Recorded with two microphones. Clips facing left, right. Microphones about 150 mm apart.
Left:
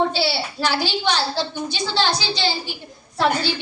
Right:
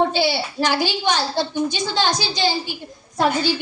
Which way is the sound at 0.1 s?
15° right (ahead or behind).